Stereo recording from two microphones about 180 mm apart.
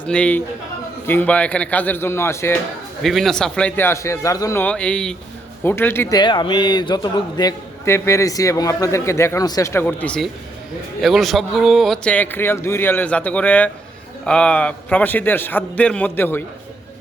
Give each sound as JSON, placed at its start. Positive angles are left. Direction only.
{"t": 0.0, "sound": "a man's voice", "side_deg": 5}
{"t": 3.0, "sound": "a man's voice", "side_deg": 0}